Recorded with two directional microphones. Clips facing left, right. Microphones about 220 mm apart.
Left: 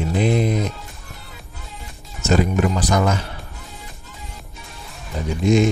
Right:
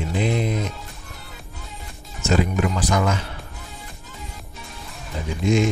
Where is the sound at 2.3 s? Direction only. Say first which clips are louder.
Left 3 dB; 40° left (ahead or behind).